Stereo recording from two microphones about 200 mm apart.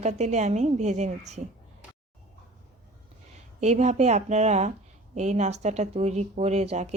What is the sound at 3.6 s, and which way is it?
Speech, 35° right (ahead or behind).